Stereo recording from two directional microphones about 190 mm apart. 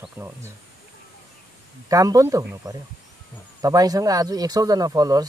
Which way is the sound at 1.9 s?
15° right (ahead or behind).